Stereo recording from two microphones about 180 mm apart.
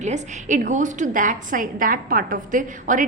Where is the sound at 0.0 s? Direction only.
40° right (ahead or behind).